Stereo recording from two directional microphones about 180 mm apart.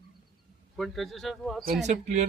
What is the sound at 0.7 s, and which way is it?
Speech, centre (ahead or behind).